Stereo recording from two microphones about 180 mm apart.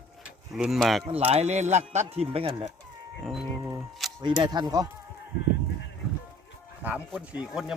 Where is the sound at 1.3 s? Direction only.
40° right (ahead or behind).